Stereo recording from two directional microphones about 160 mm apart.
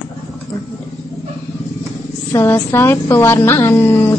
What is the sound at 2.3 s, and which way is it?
Speech, 20° left (ahead or behind).